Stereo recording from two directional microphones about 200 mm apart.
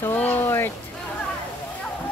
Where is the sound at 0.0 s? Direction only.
10° left (ahead or behind).